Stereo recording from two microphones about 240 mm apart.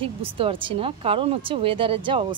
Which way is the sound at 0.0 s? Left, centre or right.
Right.